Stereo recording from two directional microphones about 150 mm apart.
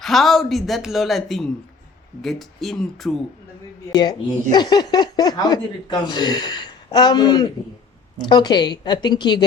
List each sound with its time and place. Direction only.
0.0 s a woman's voice: centre (ahead or behind)
4.5 s speech: 30° left (ahead or behind)